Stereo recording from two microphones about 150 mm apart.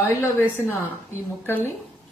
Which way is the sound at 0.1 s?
20° left (ahead or behind).